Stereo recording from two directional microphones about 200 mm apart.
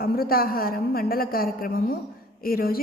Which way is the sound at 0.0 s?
50° left (ahead or behind).